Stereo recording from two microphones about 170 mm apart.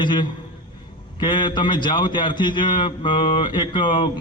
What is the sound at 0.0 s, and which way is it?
A man's voice, 25° left (ahead or behind).